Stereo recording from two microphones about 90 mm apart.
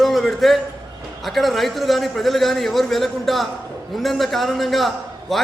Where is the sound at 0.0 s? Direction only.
Centre (ahead or behind).